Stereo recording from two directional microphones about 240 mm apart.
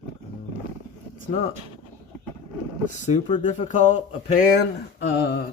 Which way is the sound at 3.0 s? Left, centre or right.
Left.